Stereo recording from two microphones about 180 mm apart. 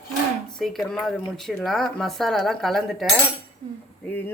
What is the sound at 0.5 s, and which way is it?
Speech, centre (ahead or behind).